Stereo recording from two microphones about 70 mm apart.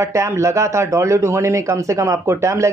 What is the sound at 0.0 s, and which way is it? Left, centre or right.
Speech, right.